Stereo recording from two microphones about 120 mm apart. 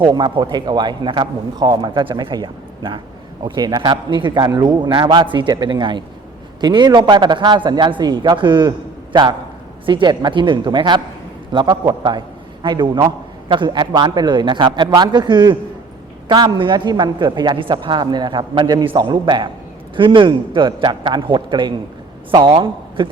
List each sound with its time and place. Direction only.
0.0 s a man's voice: 40° right (ahead or behind)
9.8 s a man's voice: 40° right (ahead or behind)